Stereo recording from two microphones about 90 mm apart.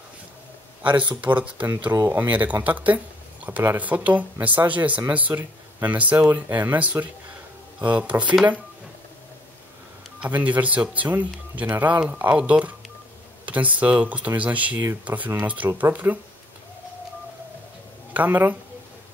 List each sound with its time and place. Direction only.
0.8 s speech: 65° right (ahead or behind)
1.2 s speech: 15° right (ahead or behind)
10.2 s speech: 15° right (ahead or behind)
18.1 s speech: 20° right (ahead or behind)